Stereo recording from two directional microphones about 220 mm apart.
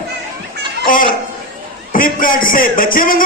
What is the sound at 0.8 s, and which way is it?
A man's voice, 40° left (ahead or behind).